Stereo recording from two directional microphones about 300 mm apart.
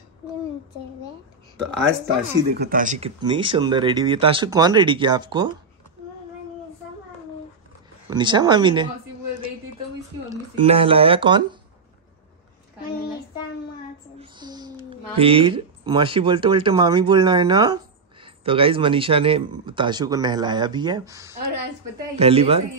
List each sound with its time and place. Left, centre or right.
2.5 s a man's voice: right; by 5.5 s centre
8.1 s a man's voice: centre
10.6 s a man's voice: centre
14.3 s a sound: centre
15.1 s a man's voice: centre